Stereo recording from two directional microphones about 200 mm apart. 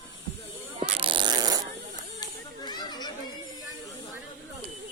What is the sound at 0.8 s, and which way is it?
Fart, 25° right (ahead or behind).